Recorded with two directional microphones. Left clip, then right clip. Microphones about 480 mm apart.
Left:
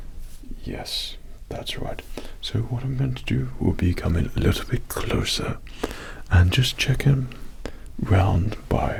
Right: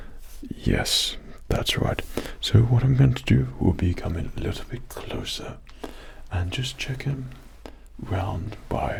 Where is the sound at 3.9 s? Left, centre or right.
Left.